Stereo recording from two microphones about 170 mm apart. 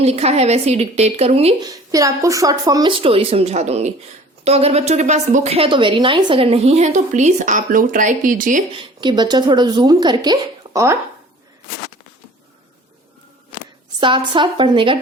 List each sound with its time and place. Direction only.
0.0 s a woman's voice: 40° right (ahead or behind)
1.7 s a woman's voice: 20° right (ahead or behind)
3.0 s a woman's voice: 35° right (ahead or behind); by 8.6 s 50° right (ahead or behind)
8.8 s a woman's voice: 25° right (ahead or behind)
14.0 s a woman's voice: 30° right (ahead or behind)